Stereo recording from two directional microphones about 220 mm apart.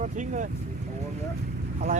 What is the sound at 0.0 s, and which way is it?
Speech, 35° right (ahead or behind).